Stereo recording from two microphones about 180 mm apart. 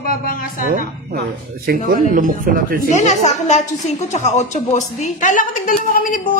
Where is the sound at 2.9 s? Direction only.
40° left (ahead or behind).